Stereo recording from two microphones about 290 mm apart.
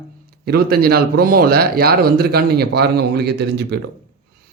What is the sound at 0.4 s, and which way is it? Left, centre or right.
Speech, right.